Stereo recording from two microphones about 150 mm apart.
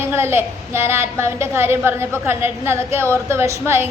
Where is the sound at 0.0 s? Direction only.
15° right (ahead or behind).